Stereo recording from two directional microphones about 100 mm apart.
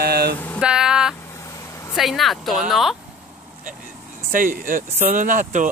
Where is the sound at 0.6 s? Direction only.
5° right (ahead or behind).